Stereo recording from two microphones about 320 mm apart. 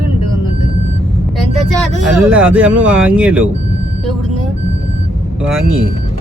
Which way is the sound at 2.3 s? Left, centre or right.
Centre.